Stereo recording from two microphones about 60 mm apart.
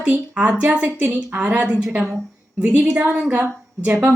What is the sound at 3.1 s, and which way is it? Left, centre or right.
Speech, centre.